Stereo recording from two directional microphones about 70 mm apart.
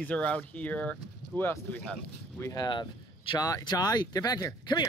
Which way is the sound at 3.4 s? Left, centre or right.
Left.